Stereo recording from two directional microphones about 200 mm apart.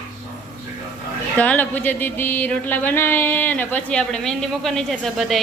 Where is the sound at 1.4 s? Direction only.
10° left (ahead or behind).